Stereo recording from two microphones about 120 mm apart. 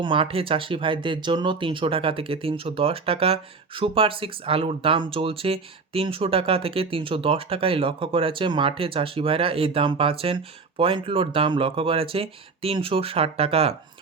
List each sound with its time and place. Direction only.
0.0 s speech: 45° right (ahead or behind)